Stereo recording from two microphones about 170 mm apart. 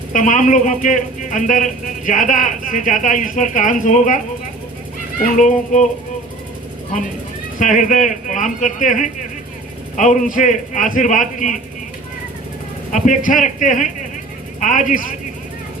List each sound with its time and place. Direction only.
0.1 s a man's voice: 50° left (ahead or behind)
5.2 s a man's voice: 45° left (ahead or behind)
7.6 s a man's voice: 50° left (ahead or behind)
12.9 s a man's voice: 50° left (ahead or behind)